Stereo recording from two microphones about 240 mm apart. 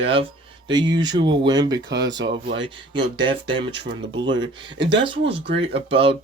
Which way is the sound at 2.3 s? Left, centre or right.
Right.